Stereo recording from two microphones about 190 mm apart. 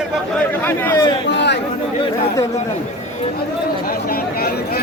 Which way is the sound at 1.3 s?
65° left (ahead or behind).